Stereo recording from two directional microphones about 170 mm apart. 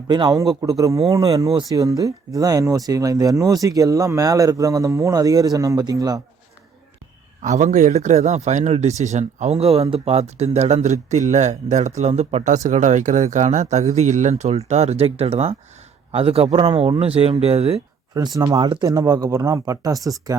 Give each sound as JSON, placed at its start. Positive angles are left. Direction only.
{"t": 0.1, "sound": "speech", "side_deg": -25}
{"t": 7.4, "sound": "a man's voice", "side_deg": -45}
{"t": 18.1, "sound": "speech", "side_deg": -20}